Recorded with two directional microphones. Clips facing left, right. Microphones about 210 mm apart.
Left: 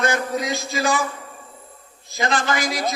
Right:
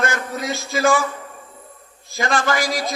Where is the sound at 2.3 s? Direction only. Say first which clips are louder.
Right 3 dB; 20° left (ahead or behind).